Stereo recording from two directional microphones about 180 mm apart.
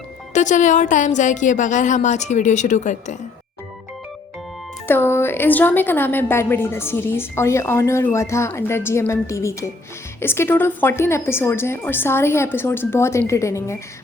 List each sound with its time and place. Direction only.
0.3 s a woman's voice: 45° left (ahead or behind)
4.9 s a woman's voice: 15° left (ahead or behind)